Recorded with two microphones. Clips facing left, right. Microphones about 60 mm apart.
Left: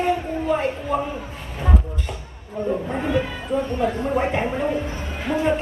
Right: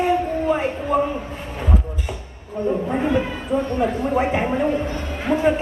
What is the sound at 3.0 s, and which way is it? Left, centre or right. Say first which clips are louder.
Speech: right 2 dB; centre.